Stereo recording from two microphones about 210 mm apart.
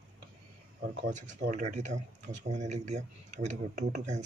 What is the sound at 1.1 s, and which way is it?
Speech, 35° right (ahead or behind).